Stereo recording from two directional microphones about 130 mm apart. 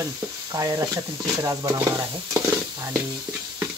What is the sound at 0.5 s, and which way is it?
Stir, 25° right (ahead or behind).